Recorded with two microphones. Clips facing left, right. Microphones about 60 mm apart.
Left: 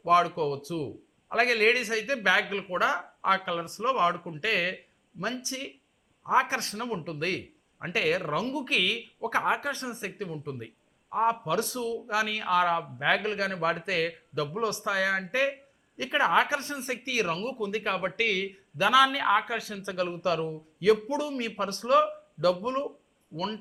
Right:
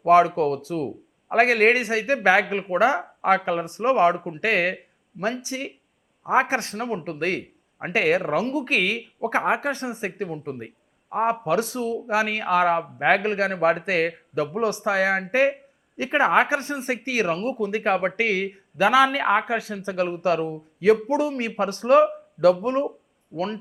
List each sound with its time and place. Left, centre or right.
0.0 s a man's voice: right
13.0 s speech: right
13.2 s a man's voice: right